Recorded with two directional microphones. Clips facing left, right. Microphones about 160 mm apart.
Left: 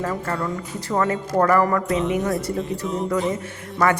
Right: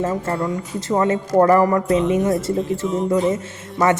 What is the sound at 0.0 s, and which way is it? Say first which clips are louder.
Speech: right 4 dB; 25° right (ahead or behind).